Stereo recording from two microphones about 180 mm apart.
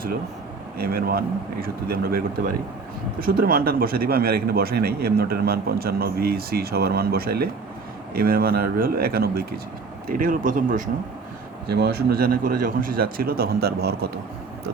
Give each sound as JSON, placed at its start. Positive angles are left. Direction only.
{"t": 0.8, "sound": "speech", "side_deg": -55}
{"t": 11.7, "sound": "speech", "side_deg": -60}